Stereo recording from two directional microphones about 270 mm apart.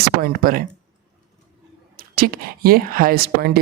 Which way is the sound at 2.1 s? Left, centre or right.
Right.